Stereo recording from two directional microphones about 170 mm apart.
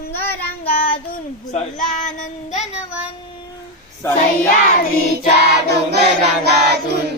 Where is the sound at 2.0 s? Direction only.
45° left (ahead or behind).